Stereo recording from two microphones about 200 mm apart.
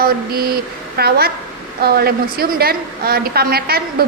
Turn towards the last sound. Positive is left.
turn(degrees=-50)  # may be behind; listen again after turning